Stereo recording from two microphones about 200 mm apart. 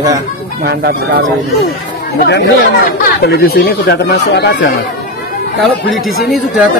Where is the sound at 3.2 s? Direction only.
50° left (ahead or behind).